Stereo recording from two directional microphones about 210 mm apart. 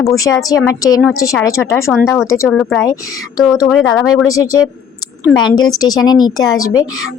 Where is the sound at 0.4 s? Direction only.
15° left (ahead or behind).